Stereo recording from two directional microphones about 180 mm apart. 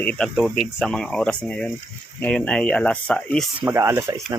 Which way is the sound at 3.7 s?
15° right (ahead or behind).